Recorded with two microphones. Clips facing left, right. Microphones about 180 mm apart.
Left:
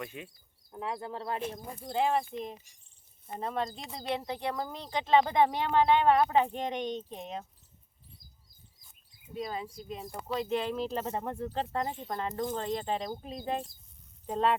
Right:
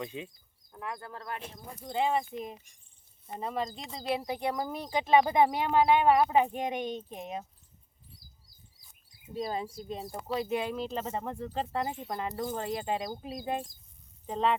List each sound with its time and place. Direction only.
0.0 s speech: 20° right (ahead or behind)
0.7 s speech: 25° left (ahead or behind)
1.8 s speech: centre (ahead or behind)
9.3 s speech: 35° right (ahead or behind)
10.2 s speech: 10° right (ahead or behind)
10.8 s speech: centre (ahead or behind)
14.3 s speech: centre (ahead or behind)